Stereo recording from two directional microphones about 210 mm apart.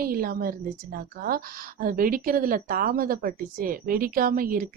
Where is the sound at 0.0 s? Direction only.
45° right (ahead or behind).